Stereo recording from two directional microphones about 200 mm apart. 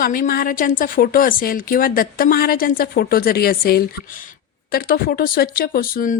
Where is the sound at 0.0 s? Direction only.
45° left (ahead or behind).